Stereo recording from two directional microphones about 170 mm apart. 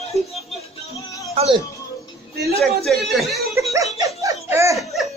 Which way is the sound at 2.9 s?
Centre (ahead or behind).